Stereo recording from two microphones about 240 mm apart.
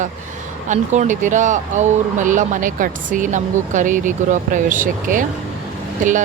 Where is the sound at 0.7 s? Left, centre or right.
Right.